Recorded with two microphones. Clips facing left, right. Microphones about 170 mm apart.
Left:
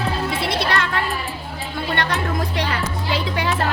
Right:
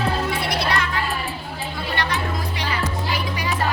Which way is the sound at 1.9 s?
60° left (ahead or behind).